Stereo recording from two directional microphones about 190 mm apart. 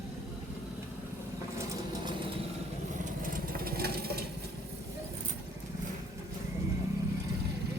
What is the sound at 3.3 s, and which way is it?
Vehicle, 50° right (ahead or behind).